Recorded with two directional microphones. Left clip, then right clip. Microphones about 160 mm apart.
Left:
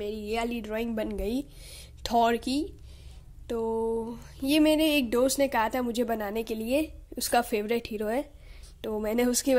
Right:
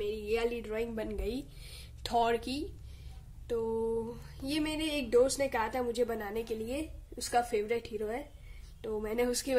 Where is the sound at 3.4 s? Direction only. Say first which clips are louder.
Left 4 dB; 45° left (ahead or behind).